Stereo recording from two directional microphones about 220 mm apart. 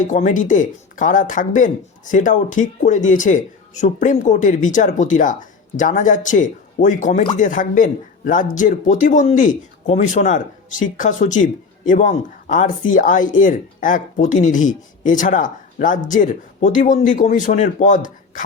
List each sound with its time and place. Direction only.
0.0 s speech: 35° left (ahead or behind)